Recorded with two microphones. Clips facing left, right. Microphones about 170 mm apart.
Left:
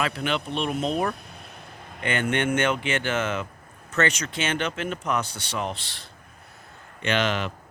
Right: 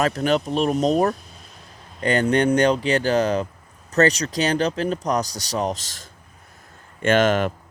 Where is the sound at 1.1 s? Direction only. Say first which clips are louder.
Right 2 dB; 60° left (ahead or behind).